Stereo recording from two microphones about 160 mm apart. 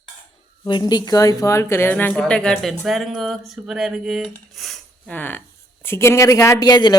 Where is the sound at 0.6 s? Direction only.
25° left (ahead or behind).